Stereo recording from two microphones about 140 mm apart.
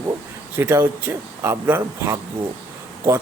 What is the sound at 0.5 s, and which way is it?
Speech, 15° right (ahead or behind).